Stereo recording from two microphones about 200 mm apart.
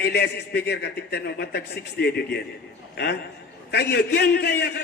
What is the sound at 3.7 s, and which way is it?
A man's voice, 55° left (ahead or behind).